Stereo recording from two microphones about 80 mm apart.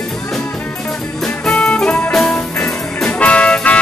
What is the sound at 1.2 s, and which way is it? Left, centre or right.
Music, centre.